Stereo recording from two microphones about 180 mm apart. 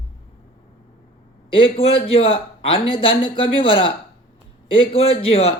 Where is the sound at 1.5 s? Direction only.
30° left (ahead or behind).